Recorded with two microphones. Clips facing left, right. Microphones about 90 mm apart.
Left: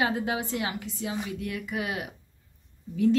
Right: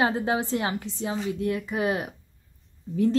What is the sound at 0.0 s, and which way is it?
A woman's voice, 35° right (ahead or behind).